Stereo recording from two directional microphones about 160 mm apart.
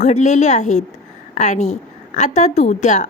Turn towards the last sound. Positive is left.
turn(degrees=45)  # may be behind; listen again after turning